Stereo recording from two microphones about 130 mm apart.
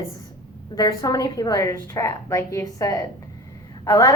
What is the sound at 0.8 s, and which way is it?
A woman's voice, 30° left (ahead or behind).